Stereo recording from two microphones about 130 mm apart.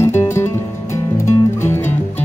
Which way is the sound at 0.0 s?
20° left (ahead or behind).